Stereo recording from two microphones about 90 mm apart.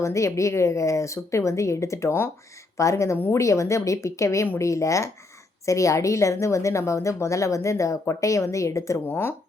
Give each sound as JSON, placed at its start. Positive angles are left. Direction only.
{"t": 0.0, "sound": "a woman's voice", "side_deg": 35}